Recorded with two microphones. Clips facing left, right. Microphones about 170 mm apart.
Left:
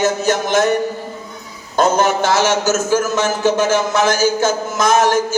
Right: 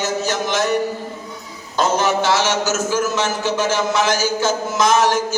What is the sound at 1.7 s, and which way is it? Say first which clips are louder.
A man's voice: left 3 dB; 50° left (ahead or behind).